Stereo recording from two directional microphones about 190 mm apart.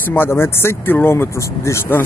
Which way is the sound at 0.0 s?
10° left (ahead or behind).